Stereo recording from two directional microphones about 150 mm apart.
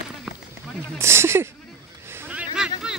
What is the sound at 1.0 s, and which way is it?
Speech, 15° right (ahead or behind).